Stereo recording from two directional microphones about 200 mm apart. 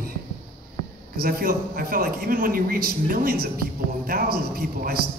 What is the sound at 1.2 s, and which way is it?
A man's voice, 45° right (ahead or behind).